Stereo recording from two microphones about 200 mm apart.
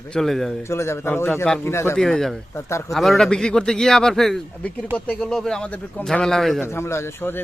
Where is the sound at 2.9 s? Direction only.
Centre (ahead or behind).